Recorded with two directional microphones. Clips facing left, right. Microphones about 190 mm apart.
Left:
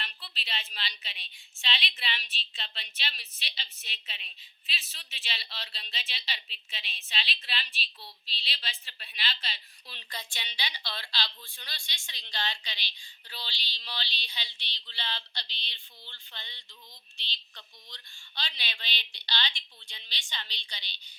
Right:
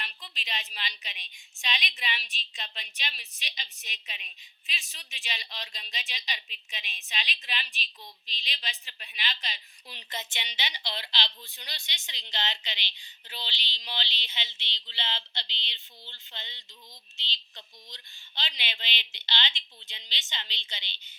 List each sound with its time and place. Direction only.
0.0 s a woman's voice: 15° right (ahead or behind)